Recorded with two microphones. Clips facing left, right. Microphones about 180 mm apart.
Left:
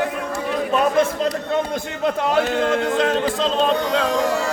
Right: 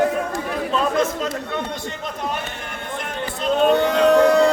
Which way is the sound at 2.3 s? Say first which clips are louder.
Left 12 dB; 90° left.